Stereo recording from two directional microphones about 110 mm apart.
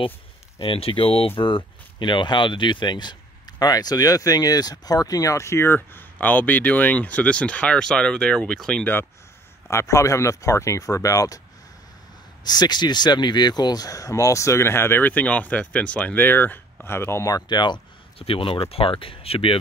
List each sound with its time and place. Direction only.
0.6 s speech: 55° left (ahead or behind); by 8.9 s 5° left (ahead or behind)
9.7 s speech: 25° left (ahead or behind)
12.4 s speech: 40° left (ahead or behind)
18.2 s speech: 55° left (ahead or behind)